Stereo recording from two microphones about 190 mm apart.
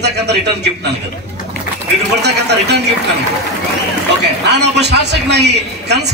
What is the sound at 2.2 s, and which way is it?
Speech, 60° right (ahead or behind).